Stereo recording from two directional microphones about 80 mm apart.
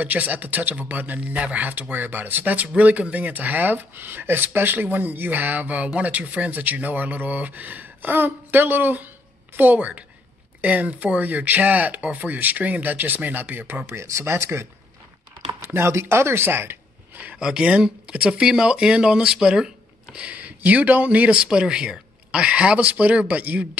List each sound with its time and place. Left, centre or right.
0.0 s a man's voice: right
13.9 s speech: right
17.2 s speech: centre